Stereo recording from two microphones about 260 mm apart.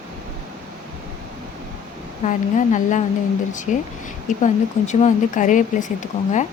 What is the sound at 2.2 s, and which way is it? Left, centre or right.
Speech, left.